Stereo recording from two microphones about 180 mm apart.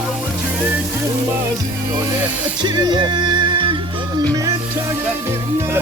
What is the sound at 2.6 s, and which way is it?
Music, 25° right (ahead or behind).